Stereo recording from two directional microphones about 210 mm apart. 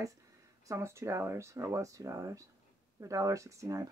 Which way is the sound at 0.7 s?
15° right (ahead or behind).